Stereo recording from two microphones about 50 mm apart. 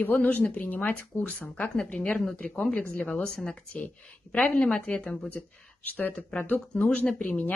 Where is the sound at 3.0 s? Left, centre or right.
Left.